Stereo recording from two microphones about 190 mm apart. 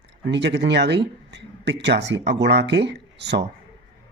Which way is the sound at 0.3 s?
65° right (ahead or behind).